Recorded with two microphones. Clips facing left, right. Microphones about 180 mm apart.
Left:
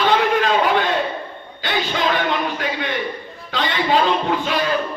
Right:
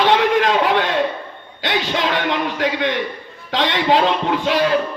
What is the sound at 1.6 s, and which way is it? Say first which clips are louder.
A man's voice: right 1 dB; 75° right (ahead or behind).